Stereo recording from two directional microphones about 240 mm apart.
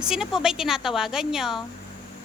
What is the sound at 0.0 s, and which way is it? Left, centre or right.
A woman's voice, centre.